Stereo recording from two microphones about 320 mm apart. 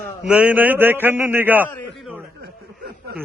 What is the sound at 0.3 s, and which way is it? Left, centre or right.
A man's voice, centre.